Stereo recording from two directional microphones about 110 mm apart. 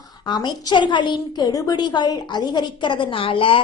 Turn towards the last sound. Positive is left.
turn(degrees=50)  # may be behind; listen again after turning